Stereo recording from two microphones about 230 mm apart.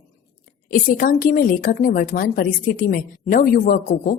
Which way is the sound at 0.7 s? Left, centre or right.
Left.